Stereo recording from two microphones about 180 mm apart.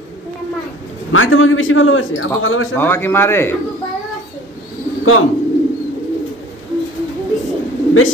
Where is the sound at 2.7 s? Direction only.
10° left (ahead or behind).